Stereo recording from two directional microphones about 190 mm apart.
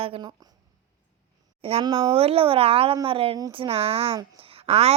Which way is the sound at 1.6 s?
25° right (ahead or behind).